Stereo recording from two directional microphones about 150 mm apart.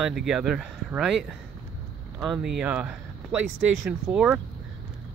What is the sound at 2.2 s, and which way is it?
Speech, centre (ahead or behind).